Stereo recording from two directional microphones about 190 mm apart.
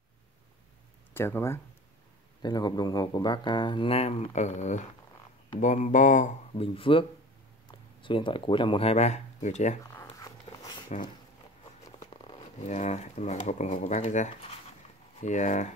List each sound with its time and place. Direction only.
1.1 s speech: 15° left (ahead or behind); by 9.8 s 40° left (ahead or behind)
10.0 s walk: 20° left (ahead or behind)
12.5 s speech: 35° left (ahead or behind)